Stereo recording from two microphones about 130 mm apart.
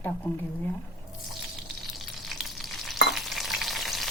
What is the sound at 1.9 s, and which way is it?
Stir, centre (ahead or behind).